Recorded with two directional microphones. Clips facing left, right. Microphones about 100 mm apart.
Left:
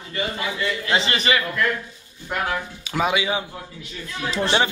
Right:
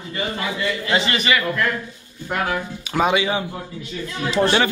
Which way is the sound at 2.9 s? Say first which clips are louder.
Right 3 dB; 5° left (ahead or behind).